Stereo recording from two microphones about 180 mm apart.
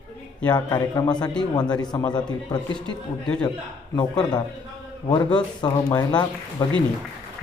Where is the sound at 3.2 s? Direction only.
5° left (ahead or behind).